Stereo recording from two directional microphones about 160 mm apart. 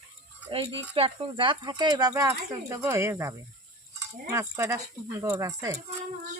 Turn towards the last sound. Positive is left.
turn(degrees=-20)  # may be behind; listen again after turning